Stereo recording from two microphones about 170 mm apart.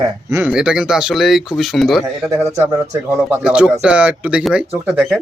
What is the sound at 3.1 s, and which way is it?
Speech, 15° right (ahead or behind).